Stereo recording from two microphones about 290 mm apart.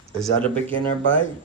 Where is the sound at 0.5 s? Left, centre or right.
Centre.